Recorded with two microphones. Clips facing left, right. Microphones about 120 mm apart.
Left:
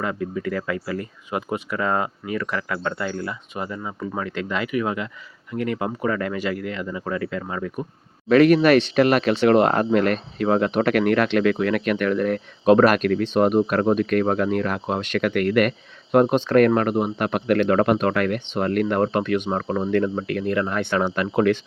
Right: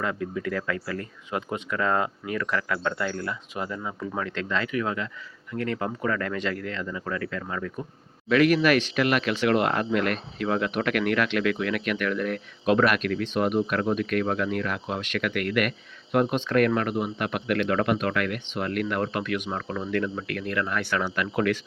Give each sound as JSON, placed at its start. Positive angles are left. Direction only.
{"t": 0.0, "sound": "speech", "side_deg": 5}
{"t": 8.3, "sound": "speech", "side_deg": 35}